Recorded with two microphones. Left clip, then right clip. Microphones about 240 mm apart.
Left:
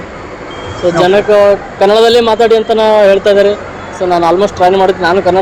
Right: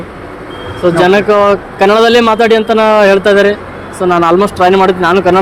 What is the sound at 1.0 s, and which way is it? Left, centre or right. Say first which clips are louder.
A man's voice: left 1 dB; right.